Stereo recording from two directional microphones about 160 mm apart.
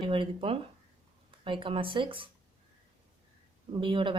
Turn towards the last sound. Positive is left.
turn(degrees=-30)  # may be behind; listen again after turning